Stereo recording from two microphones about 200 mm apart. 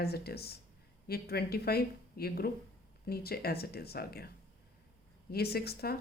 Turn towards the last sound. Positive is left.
turn(degrees=50)  # may be behind; listen again after turning